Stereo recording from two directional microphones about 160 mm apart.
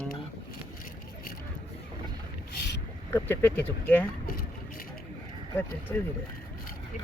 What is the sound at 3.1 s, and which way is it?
Speech, 10° left (ahead or behind).